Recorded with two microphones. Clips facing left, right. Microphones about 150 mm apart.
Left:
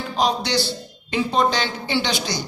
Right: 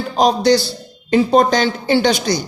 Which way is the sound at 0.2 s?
40° right (ahead or behind).